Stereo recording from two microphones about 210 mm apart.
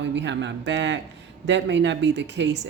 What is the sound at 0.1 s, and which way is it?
Speech, 60° right (ahead or behind).